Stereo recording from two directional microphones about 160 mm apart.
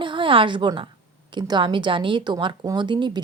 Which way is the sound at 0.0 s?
30° right (ahead or behind).